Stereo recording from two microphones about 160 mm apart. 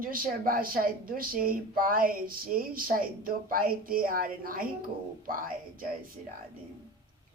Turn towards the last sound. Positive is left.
turn(degrees=-60)  # may be behind; listen again after turning